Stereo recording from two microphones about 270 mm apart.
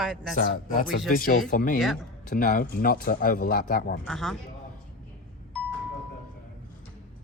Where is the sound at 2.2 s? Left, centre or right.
Left.